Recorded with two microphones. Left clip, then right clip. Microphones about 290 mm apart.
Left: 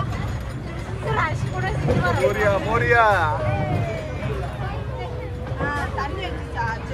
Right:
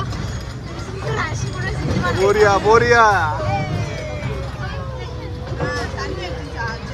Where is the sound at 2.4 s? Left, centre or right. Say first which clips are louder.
Right 7 dB; centre.